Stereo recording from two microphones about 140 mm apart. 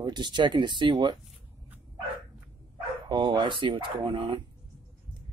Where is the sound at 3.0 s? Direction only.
35° right (ahead or behind).